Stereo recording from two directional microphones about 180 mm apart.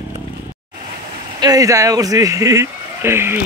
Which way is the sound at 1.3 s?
20° right (ahead or behind).